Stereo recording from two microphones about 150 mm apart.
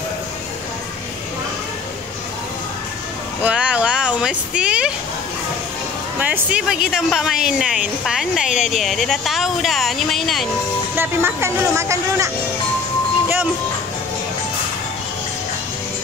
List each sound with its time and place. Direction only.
3.4 s vehicle: 10° right (ahead or behind)
6.1 s speech: 10° right (ahead or behind)
11.0 s speech: 15° right (ahead or behind)